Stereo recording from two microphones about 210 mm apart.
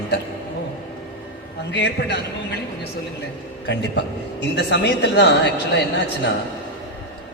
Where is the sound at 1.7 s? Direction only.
55° left (ahead or behind).